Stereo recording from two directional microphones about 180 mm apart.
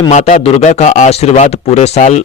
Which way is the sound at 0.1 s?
40° left (ahead or behind).